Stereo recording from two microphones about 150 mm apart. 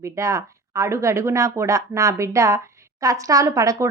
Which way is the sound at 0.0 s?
20° right (ahead or behind).